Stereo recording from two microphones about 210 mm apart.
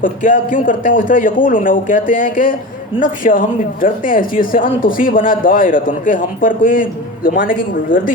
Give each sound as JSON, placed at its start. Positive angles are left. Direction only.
{"t": 0.0, "sound": "a woman's voice", "side_deg": 40}